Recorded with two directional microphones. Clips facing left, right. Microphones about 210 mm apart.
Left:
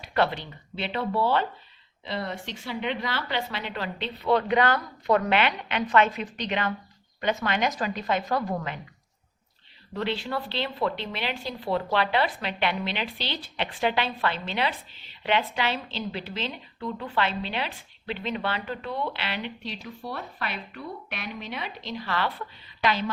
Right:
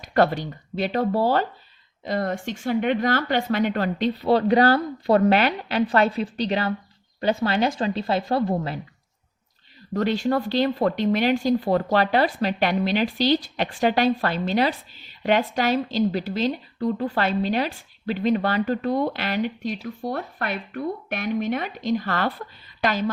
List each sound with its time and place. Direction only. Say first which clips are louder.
0.0 s speech: right 5 dB; 45° right (ahead or behind)
9.9 s speech: right 8 dB; 45° right (ahead or behind)